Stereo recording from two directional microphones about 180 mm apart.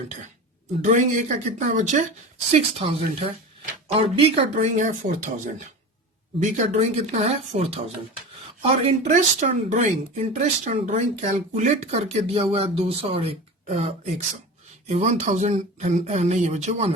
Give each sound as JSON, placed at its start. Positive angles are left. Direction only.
{"t": 0.8, "sound": "speech", "side_deg": -45}